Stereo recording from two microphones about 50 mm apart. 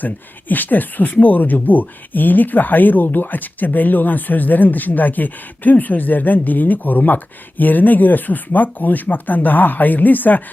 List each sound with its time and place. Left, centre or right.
0.0 s speech: left